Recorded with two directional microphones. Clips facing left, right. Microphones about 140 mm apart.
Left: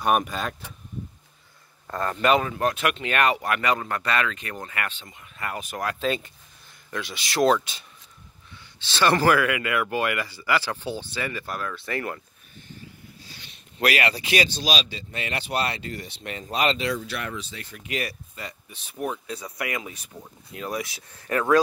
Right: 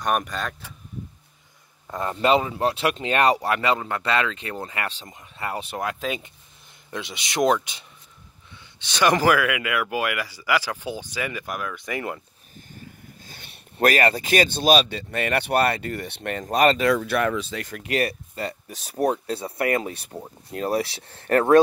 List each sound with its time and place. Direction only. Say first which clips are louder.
0.0 s speech: left 2 dB; 5° left (ahead or behind)
1.9 s speech: right 1 dB; 20° right (ahead or behind)
5.9 s speech: left 3 dB; 10° right (ahead or behind)
12.7 s speech: right 1 dB; 50° right (ahead or behind); by 17.6 s 70° right (ahead or behind)
17.7 s speech: right 6 dB; 55° right (ahead or behind)
18.3 s speech: right 8 dB; 35° right (ahead or behind)
21.3 s speech: right 4 dB; 50° right (ahead or behind)